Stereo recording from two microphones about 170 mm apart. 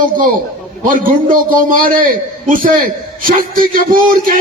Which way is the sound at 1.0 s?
55° right (ahead or behind).